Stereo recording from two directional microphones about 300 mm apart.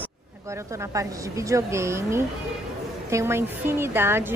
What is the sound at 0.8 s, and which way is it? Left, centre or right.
A woman's voice, centre.